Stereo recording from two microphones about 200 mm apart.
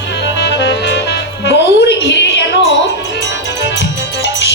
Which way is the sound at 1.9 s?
60° left (ahead or behind).